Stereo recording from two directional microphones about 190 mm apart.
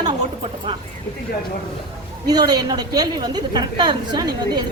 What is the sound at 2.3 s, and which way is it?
A woman's voice, 20° right (ahead or behind).